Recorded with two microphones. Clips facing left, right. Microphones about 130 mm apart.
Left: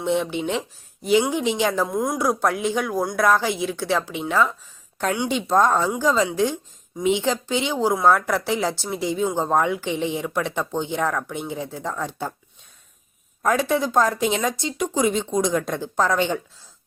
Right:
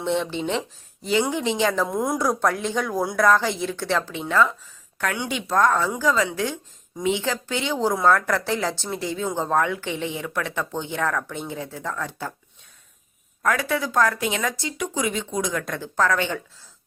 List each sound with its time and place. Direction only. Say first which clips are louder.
0.0 s speech: left 2 dB; 10° left (ahead or behind)
13.4 s speech: left 3 dB; 25° left (ahead or behind)